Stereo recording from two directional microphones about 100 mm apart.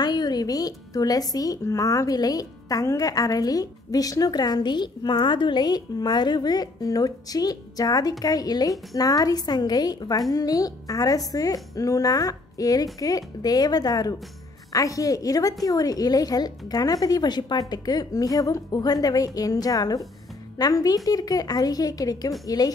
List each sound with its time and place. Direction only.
0.0 s speech: 45° left (ahead or behind)